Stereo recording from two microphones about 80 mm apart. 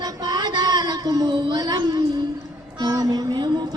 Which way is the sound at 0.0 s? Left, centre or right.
Right.